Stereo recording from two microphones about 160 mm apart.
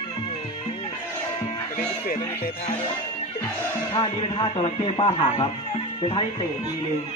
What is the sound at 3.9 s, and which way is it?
Speech, 30° left (ahead or behind).